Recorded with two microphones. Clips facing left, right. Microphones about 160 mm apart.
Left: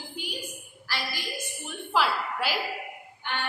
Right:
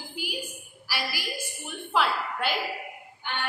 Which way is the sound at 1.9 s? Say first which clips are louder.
Even; centre (ahead or behind).